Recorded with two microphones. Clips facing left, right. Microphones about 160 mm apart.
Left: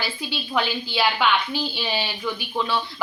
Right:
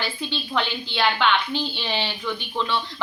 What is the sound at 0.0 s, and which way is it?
A woman's voice, 10° left (ahead or behind).